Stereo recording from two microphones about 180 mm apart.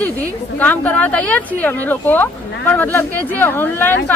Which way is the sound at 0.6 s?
10° left (ahead or behind).